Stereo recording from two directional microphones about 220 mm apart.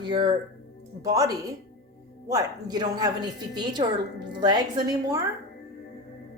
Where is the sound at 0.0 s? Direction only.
20° right (ahead or behind).